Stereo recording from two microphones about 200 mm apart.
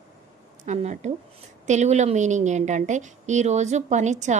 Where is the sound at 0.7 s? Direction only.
35° right (ahead or behind).